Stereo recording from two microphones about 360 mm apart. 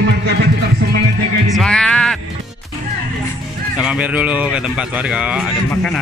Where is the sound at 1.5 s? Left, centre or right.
Centre.